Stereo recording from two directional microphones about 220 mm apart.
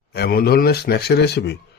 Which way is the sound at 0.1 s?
45° left (ahead or behind).